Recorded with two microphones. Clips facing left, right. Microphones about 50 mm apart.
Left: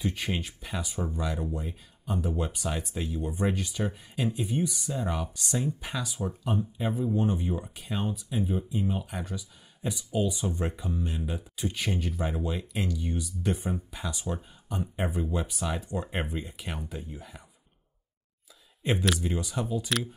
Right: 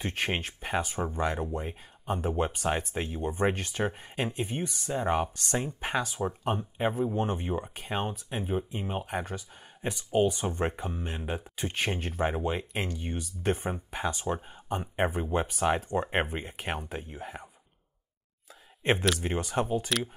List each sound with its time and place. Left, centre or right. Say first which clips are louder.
0.0 s speech: right 1 dB; right
19.1 s speech: right 2 dB; right